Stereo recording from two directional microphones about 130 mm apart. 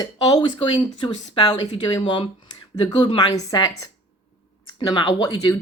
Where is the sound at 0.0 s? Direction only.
30° left (ahead or behind).